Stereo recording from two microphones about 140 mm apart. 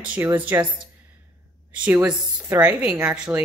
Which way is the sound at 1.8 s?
10° right (ahead or behind).